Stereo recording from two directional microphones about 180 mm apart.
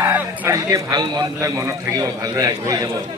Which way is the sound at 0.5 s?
20° right (ahead or behind).